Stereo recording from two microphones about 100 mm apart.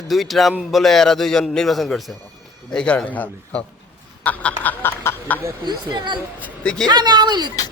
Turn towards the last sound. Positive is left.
turn(degrees=-45)  # may be behind; listen again after turning